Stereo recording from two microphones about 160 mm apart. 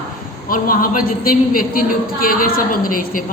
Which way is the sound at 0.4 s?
60° left (ahead or behind).